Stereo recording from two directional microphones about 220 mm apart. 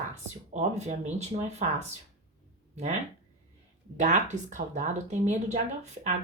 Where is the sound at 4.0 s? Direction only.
35° right (ahead or behind).